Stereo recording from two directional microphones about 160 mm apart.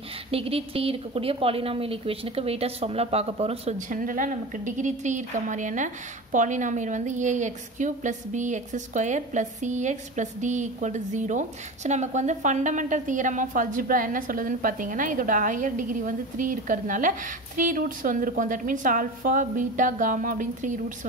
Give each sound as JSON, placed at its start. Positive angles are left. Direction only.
{"t": 0.3, "sound": "a woman's voice", "side_deg": -35}